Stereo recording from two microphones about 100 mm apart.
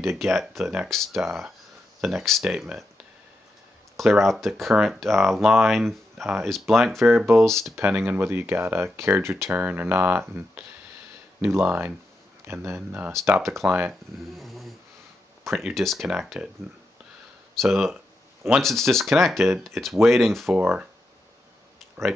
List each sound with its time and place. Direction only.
0.2 s speech: centre (ahead or behind)
3.9 s speech: centre (ahead or behind)
7.2 s speech: 25° right (ahead or behind)
11.4 s speech: 25° right (ahead or behind)
14.3 s speech: centre (ahead or behind)
16.1 s speech: 10° right (ahead or behind)
17.6 s speech: centre (ahead or behind)
20.5 s speech: 15° right (ahead or behind)